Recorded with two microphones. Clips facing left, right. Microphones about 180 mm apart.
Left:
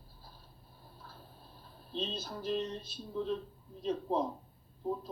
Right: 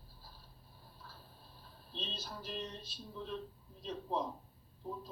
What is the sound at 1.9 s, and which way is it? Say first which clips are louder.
Speech: left 8 dB; 50° left (ahead or behind).